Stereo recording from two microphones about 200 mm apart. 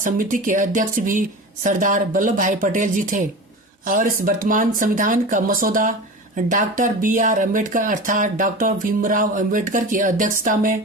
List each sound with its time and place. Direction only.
0.0 s speech: 40° right (ahead or behind)